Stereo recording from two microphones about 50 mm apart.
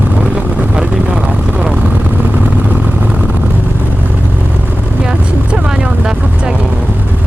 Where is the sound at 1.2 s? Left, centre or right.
Centre.